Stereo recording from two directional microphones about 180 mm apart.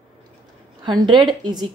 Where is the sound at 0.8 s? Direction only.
25° right (ahead or behind).